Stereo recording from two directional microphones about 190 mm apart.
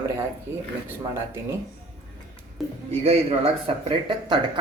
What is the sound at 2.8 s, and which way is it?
Speech, 30° right (ahead or behind).